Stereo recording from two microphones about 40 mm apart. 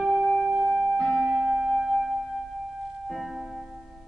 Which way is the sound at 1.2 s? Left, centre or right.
Right.